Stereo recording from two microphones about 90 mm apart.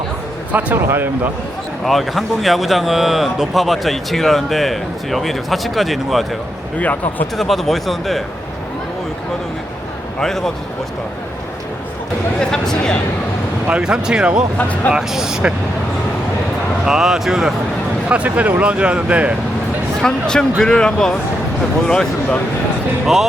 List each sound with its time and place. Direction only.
0.5 s speech: 25° right (ahead or behind)
1.8 s speech: centre (ahead or behind)
6.7 s speech: 20° left (ahead or behind)
7.3 s speech: centre (ahead or behind)
10.2 s speech: 5° left (ahead or behind)
12.4 s speech: 10° left (ahead or behind)
13.7 s speech: 10° right (ahead or behind)
14.6 s speech: 15° left (ahead or behind)
14.9 s speech: 5° right (ahead or behind)
16.8 s speech: 5° right (ahead or behind)
18.1 s speech: 15° right (ahead or behind)
20.0 s speech: 5° left (ahead or behind)